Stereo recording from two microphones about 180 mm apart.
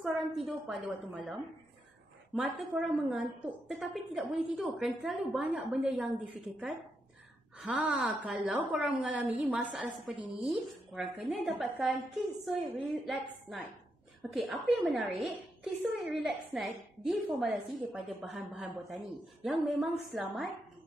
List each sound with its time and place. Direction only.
0.3 s a woman's voice: centre (ahead or behind)
7.8 s a woman's voice: 5° right (ahead or behind)
10.1 s a woman's voice: 30° right (ahead or behind)
11.0 s a woman's voice: centre (ahead or behind)